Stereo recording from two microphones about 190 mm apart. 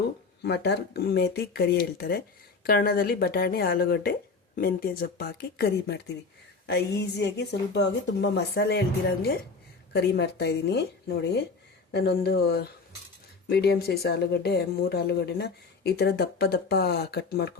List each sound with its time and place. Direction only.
0.4 s speech: 60° left (ahead or behind)